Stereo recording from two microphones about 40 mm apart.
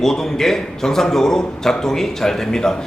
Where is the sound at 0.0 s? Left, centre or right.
Centre.